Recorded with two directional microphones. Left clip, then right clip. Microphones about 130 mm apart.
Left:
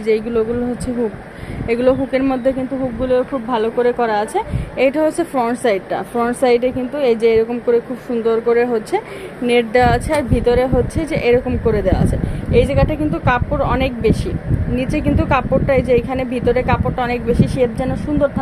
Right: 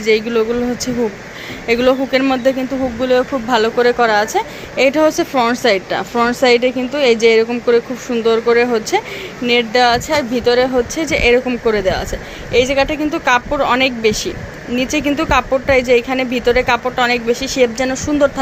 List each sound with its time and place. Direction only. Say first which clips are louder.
0.0 s a woman's voice: right 2 dB; centre (ahead or behind)
1.6 s a woman's voice: right 2 dB; centre (ahead or behind)
3.0 s speech: right 2 dB; 20° right (ahead or behind)
3.6 s a woman's voice: right 3 dB; 5° right (ahead or behind)
9.5 s a woman's voice: right 1 dB; 15° left (ahead or behind); by 17.9 s 10° right (ahead or behind)